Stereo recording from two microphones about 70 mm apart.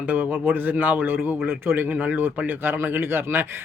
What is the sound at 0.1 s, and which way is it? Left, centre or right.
Speech, right.